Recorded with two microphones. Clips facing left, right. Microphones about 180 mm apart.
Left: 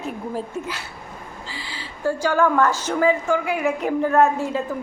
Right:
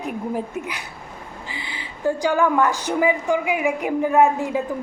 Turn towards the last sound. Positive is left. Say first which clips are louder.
# right 1 dB
turn(degrees=-15)  # may be behind; listen again after turning